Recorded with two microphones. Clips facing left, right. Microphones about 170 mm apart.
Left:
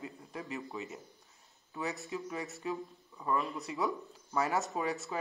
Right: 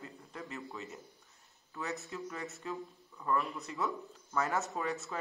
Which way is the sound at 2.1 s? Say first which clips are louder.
Left 3 dB; 10° left (ahead or behind).